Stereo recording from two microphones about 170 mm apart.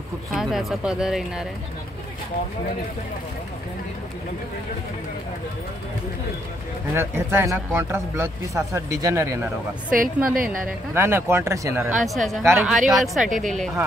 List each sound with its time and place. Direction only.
0.3 s speech: centre (ahead or behind)
6.9 s speech: 15° right (ahead or behind)
9.8 s a woman's voice: 55° right (ahead or behind)
11.0 s speech: 15° right (ahead or behind); by 13.7 s centre (ahead or behind)